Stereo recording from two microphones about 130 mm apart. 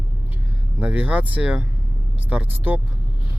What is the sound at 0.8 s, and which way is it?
Speech, 15° right (ahead or behind).